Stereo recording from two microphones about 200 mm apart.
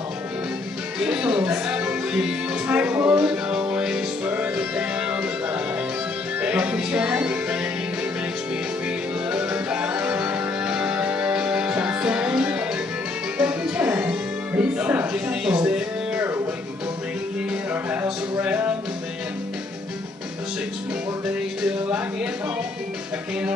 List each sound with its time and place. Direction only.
0.9 s music: 5° right (ahead or behind)
8.8 s music: 5° right (ahead or behind)
17.8 s a sound: 10° right (ahead or behind)